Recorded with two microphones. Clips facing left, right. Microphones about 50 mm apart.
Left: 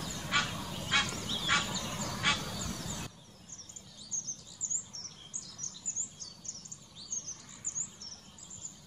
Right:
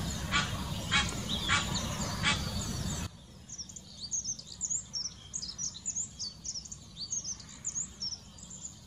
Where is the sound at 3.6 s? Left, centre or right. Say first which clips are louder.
Right 3 dB; left.